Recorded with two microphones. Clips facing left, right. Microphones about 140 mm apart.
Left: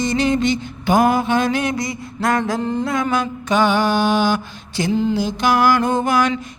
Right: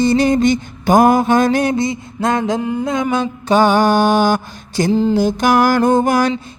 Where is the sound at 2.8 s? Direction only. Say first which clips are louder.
Right 2 dB; 20° right (ahead or behind); by 6.3 s 40° right (ahead or behind).